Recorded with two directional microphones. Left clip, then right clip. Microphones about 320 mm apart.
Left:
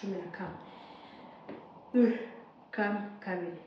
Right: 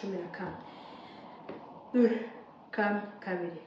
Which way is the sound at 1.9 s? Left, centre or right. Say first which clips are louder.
Right 1 dB; centre.